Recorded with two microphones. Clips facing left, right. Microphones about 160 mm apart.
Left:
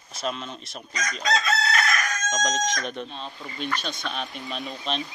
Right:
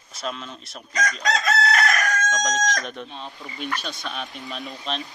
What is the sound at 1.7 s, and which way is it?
Crowing, 75° right (ahead or behind).